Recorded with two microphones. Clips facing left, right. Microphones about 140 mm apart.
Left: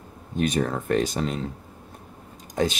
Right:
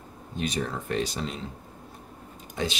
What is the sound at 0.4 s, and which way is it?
Speech, 55° left (ahead or behind).